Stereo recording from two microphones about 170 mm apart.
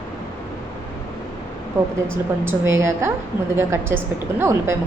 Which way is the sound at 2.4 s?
15° right (ahead or behind).